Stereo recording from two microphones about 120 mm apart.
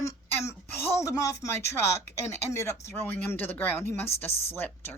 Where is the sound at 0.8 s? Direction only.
20° left (ahead or behind).